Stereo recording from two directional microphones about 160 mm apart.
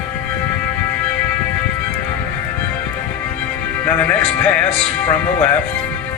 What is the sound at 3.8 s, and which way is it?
Speech, 10° left (ahead or behind).